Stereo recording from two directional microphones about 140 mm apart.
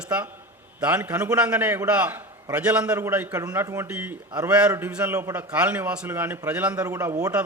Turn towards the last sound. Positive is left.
turn(degrees=-20)  # may be behind; listen again after turning